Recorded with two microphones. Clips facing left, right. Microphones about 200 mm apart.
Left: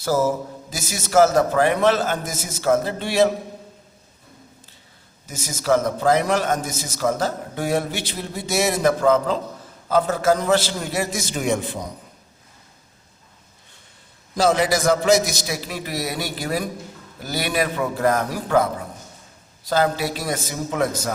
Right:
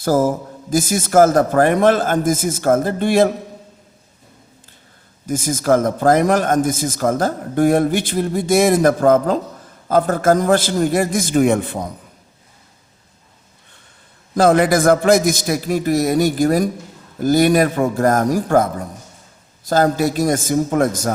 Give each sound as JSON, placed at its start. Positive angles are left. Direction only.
{"t": 0.0, "sound": "a man's voice", "side_deg": -50}
{"t": 5.3, "sound": "a man's voice", "side_deg": -50}
{"t": 14.3, "sound": "a man's voice", "side_deg": -55}